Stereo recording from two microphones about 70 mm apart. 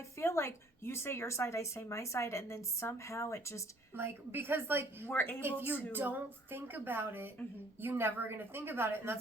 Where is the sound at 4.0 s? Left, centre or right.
Right.